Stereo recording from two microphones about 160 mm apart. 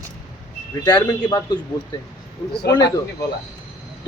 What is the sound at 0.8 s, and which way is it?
Speech, 25° left (ahead or behind).